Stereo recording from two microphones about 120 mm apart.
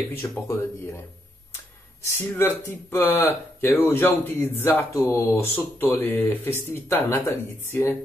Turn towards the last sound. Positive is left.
turn(degrees=20)  # may be behind; listen again after turning